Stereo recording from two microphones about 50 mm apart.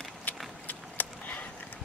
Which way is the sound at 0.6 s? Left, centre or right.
Left.